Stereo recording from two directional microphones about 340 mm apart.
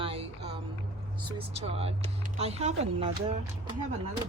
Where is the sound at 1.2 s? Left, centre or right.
Centre.